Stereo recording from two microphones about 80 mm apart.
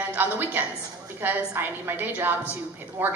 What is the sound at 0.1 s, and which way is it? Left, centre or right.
A woman's voice, right.